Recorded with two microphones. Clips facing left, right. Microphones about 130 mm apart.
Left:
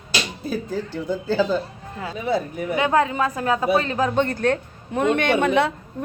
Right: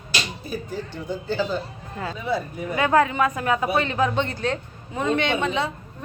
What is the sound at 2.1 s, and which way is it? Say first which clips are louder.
Speech: left 4 dB; 60° left (ahead or behind).